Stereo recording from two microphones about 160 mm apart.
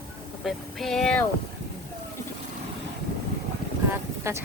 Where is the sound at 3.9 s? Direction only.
15° right (ahead or behind).